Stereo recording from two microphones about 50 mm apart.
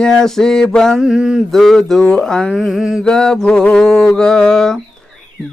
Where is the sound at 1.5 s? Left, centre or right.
Centre.